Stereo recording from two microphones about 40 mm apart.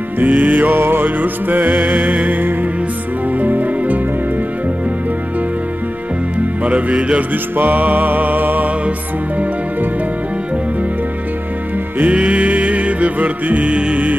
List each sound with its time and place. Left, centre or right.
0.2 s music: right
3.3 s music: right
6.6 s music: right
7.5 s music: right
12.1 s music: right
13.7 s music: right